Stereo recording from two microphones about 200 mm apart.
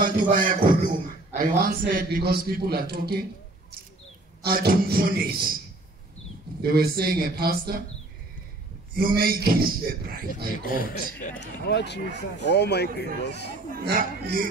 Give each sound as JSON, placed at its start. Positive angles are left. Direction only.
{"t": 0.0, "sound": "beatboxing", "side_deg": -40}
{"t": 1.4, "sound": "a man's voice", "side_deg": -45}
{"t": 4.4, "sound": "a man's voice", "side_deg": -50}
{"t": 6.6, "sound": "a man's voice", "side_deg": -50}
{"t": 8.9, "sound": "a man's voice", "side_deg": -50}
{"t": 10.6, "sound": "a man's voice", "side_deg": 45}
{"t": 11.3, "sound": "speech", "side_deg": 60}
{"t": 13.7, "sound": "a man's voice", "side_deg": -45}